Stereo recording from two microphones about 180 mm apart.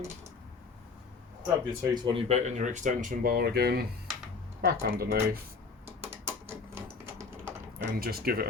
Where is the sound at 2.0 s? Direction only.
35° right (ahead or behind); by 5.4 s 60° right (ahead or behind).